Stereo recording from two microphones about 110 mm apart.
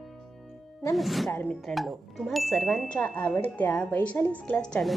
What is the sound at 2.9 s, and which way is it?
Speech, 15° left (ahead or behind).